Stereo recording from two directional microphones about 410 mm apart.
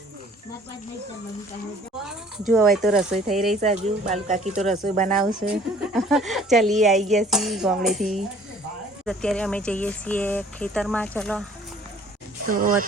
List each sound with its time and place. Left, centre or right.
2.5 s speech: centre
3.6 s speech: centre
5.9 s speech: centre
9.0 s speech: centre
12.5 s speech: centre